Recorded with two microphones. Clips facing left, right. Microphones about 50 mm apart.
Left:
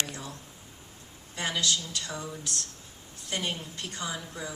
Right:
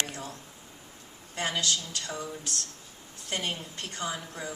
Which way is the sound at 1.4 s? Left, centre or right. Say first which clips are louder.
Even; right.